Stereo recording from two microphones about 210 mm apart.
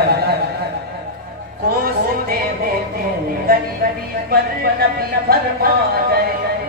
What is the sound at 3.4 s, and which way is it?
Music, 45° right (ahead or behind).